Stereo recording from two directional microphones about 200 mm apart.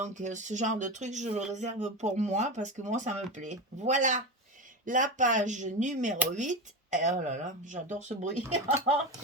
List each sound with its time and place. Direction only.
0.0 s speech: 35° right (ahead or behind)